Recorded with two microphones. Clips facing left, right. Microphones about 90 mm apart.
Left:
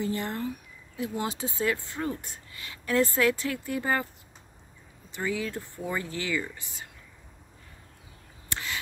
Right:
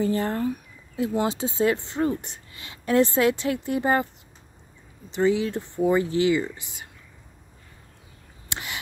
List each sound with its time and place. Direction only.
0.0 s speech: 40° right (ahead or behind)
0.9 s speech: 30° right (ahead or behind)
5.1 s speech: 20° right (ahead or behind)
8.5 s a sound: 20° right (ahead or behind)